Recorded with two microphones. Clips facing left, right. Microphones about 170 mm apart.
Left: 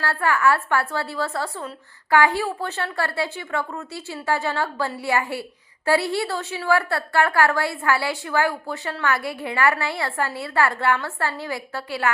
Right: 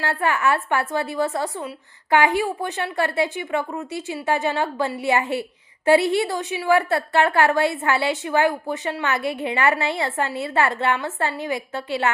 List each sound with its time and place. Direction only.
0.0 s a woman's voice: 20° right (ahead or behind)